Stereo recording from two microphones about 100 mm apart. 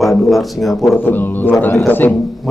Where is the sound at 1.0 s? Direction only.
20° left (ahead or behind).